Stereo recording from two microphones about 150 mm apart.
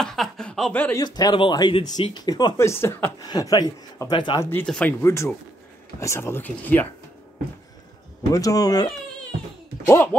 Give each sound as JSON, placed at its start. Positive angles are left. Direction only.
{"t": 0.0, "sound": "speech", "side_deg": 5}
{"t": 0.9, "sound": "speech", "side_deg": 25}
{"t": 4.6, "sound": "speech", "side_deg": 5}
{"t": 5.0, "sound": "speech", "side_deg": 20}
{"t": 8.3, "sound": "speech", "side_deg": 20}
{"t": 9.8, "sound": "speech", "side_deg": 15}